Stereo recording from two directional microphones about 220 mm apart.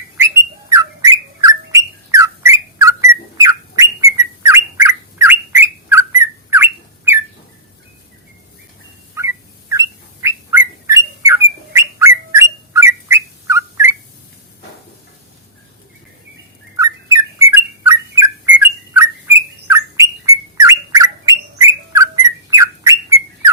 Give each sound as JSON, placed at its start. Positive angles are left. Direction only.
{"t": 0.7, "sound": "bird", "side_deg": -15}
{"t": 9.1, "sound": "bird", "side_deg": -10}
{"t": 16.7, "sound": "bird", "side_deg": -15}